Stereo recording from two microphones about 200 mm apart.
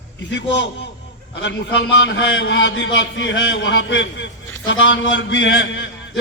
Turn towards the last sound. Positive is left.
turn(degrees=60)  # may be behind; listen again after turning